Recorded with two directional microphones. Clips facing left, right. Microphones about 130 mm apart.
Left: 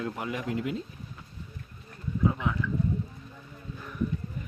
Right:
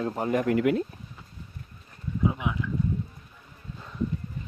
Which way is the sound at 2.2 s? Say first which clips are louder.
Even; 15° right (ahead or behind).